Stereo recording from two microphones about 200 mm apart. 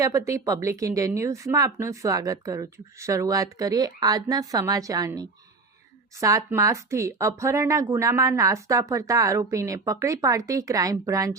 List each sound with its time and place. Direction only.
0.0 s speech: 15° right (ahead or behind)